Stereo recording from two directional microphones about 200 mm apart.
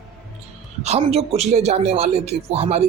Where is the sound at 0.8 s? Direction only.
30° right (ahead or behind).